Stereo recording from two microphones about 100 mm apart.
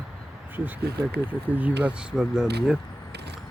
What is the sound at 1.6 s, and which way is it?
Speech, 10° right (ahead or behind).